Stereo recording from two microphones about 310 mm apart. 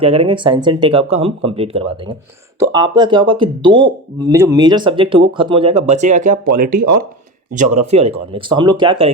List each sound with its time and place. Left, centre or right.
0.0 s speech: centre